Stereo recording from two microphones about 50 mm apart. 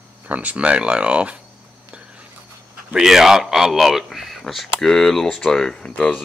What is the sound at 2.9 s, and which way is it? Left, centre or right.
Speech, centre.